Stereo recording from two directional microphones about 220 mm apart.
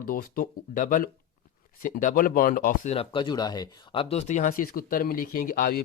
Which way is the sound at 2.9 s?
25° left (ahead or behind).